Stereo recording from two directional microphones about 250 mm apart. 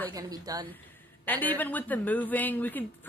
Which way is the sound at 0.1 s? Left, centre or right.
Centre.